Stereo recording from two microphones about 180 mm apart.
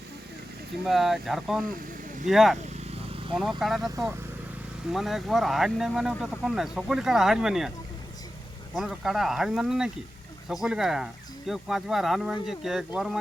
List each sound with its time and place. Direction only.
0.9 s speech: centre (ahead or behind)
4.9 s speech: centre (ahead or behind)
8.7 s speech: centre (ahead or behind)